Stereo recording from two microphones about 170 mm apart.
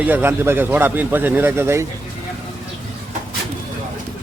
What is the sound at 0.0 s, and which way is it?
A man's voice, 10° right (ahead or behind).